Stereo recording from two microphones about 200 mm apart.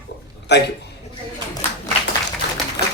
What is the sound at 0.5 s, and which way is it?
Speech, 60° left (ahead or behind).